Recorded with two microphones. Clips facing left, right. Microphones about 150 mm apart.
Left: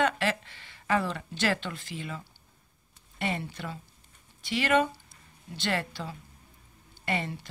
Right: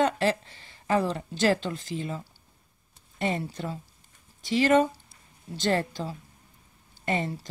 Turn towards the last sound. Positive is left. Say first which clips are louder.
# right 3 dB
turn(degrees=-35)  # may be behind; listen again after turning